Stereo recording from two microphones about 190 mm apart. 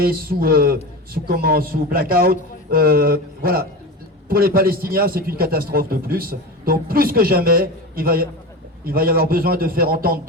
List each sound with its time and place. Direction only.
0.0 s a man's voice: 50° right (ahead or behind)